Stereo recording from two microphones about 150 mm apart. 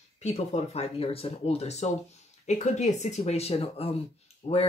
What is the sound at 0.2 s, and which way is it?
Speech, 45° left (ahead or behind).